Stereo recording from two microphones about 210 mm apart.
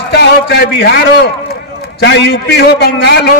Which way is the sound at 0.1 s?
50° left (ahead or behind).